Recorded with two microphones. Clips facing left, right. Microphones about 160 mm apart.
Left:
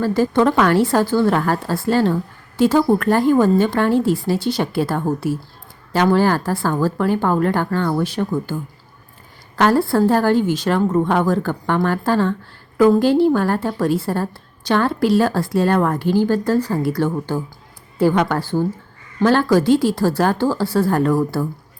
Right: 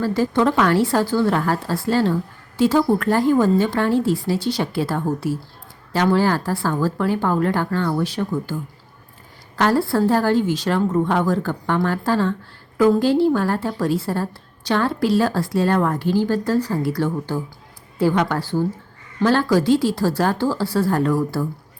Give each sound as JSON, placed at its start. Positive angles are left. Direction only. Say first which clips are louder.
{"t": 0.0, "sound": "a woman's voice", "louder": "left 2 dB", "side_deg": 50}
{"t": 9.6, "sound": "a woman's voice", "louder": "left 3 dB", "side_deg": 55}